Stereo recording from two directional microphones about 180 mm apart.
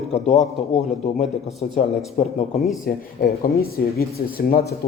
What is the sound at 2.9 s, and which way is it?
Speech, 55° left (ahead or behind).